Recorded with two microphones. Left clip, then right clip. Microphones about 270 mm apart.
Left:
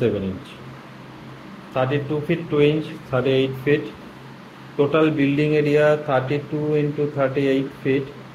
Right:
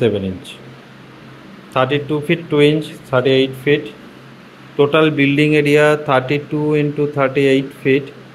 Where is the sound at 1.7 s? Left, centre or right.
Right.